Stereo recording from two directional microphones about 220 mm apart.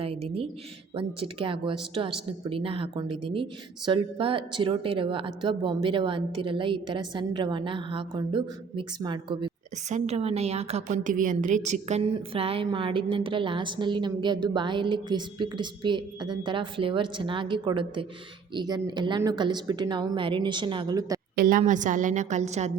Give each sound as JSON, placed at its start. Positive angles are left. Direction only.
{"t": 0.0, "sound": "a woman's voice", "side_deg": -25}
{"t": 21.3, "sound": "a woman's voice", "side_deg": -40}